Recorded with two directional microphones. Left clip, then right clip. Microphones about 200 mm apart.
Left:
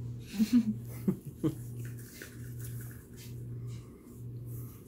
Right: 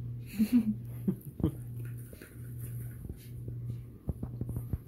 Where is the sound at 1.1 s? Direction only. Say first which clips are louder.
Left 2 dB; 10° right (ahead or behind).